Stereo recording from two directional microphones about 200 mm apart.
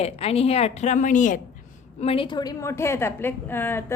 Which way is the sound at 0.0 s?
30° left (ahead or behind).